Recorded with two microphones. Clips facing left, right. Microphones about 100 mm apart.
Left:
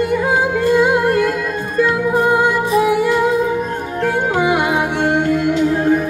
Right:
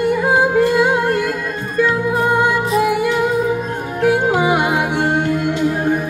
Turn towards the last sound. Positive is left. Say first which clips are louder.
# right 1 dB
turn(degrees=-15)  # may be behind; listen again after turning